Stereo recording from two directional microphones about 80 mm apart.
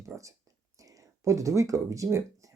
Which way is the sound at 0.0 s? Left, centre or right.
Right.